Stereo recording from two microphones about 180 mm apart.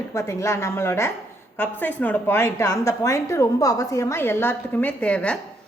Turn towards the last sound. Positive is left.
turn(degrees=5)  # may be behind; listen again after turning